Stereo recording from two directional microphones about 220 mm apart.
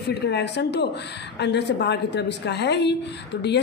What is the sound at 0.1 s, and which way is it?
A woman's voice, 50° left (ahead or behind).